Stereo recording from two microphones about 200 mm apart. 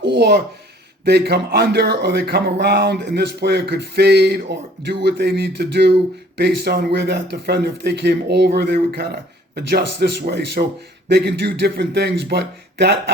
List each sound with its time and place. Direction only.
0.0 s speech: 55° right (ahead or behind)